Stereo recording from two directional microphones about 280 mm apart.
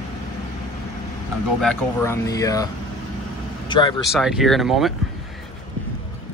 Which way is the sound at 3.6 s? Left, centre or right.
Centre.